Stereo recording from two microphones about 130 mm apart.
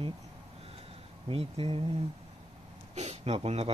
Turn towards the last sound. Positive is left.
turn(degrees=-50)  # may be behind; listen again after turning